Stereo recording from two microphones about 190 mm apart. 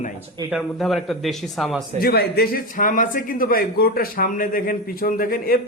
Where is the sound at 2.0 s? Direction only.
55° left (ahead or behind).